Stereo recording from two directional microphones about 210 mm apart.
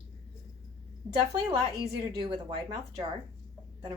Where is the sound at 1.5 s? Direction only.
20° right (ahead or behind).